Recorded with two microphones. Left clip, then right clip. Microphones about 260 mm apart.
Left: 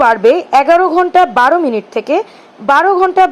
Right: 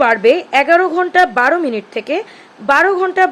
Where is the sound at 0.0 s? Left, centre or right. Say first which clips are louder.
Left 2 dB; centre.